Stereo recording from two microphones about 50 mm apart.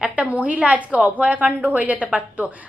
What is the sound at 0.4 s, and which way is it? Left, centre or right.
A woman's voice, right.